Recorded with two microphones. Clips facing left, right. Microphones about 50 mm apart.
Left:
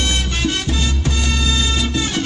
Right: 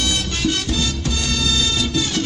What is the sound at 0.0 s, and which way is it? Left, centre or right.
Music, left.